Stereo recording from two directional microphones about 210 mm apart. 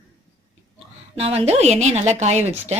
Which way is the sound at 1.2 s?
30° right (ahead or behind).